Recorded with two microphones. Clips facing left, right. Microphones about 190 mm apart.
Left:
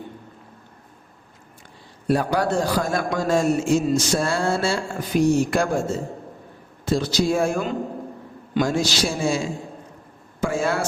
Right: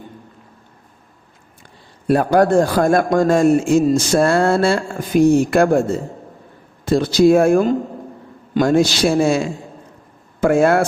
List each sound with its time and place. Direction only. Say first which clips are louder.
2.0 s a man's voice: right 7 dB; 55° right (ahead or behind)
6.8 s a man's voice: right 8 dB; 55° right (ahead or behind)